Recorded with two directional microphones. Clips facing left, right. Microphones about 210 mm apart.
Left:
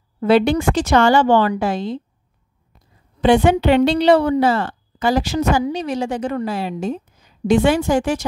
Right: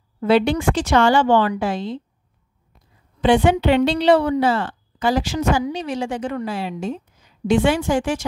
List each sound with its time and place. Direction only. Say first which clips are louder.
0.2 s a woman's voice: left 2 dB; 45° left (ahead or behind)
3.2 s speech: left 2 dB; 45° left (ahead or behind)